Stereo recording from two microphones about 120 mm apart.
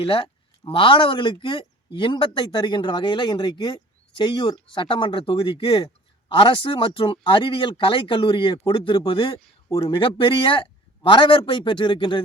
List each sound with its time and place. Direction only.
0.0 s a man's voice: 50° left (ahead or behind)